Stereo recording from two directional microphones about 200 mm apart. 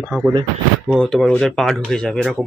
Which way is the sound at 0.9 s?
Centre (ahead or behind).